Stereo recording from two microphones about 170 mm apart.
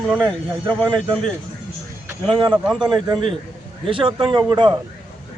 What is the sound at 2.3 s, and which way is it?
Speech, 30° right (ahead or behind).